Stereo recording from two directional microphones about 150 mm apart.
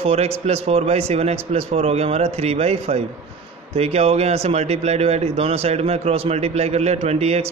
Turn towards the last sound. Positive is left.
turn(degrees=-45)  # may be behind; listen again after turning